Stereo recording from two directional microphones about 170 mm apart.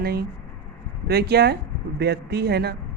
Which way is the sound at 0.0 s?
70° right (ahead or behind).